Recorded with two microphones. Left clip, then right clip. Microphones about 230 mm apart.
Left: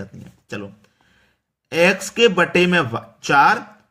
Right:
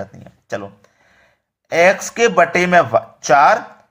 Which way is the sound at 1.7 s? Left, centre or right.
Centre.